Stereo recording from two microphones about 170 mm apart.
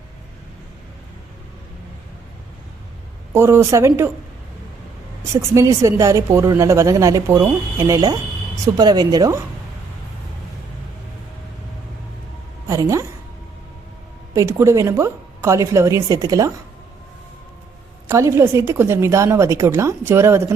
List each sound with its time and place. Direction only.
3.3 s a woman's voice: 15° right (ahead or behind)
5.3 s a woman's voice: 20° right (ahead or behind)
12.6 s a woman's voice: 20° right (ahead or behind)
14.3 s a woman's voice: 15° right (ahead or behind)
18.1 s a woman's voice: 15° right (ahead or behind)